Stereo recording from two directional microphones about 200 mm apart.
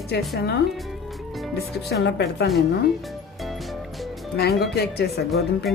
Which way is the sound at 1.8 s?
55° left (ahead or behind).